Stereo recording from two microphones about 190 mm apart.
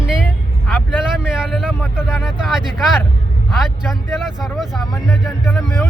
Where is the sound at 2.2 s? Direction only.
Centre (ahead or behind).